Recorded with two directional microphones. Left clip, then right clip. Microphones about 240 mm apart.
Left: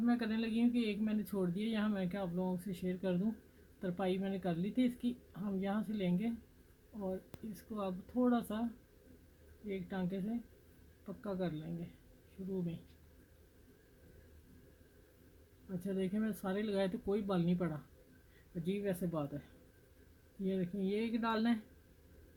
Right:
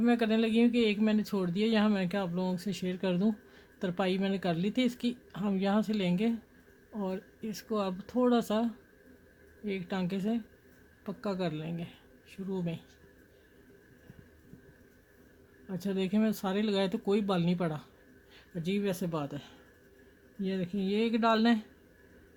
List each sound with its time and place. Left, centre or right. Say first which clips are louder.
0.0 s speech: right 9 dB; right
9.6 s speech: right 7 dB; right
15.8 s speech: right 8 dB; right
20.4 s speech: right 4 dB; right